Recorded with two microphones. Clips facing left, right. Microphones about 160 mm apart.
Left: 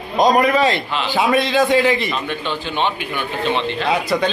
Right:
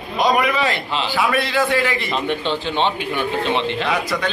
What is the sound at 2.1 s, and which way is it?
Speech, 25° right (ahead or behind).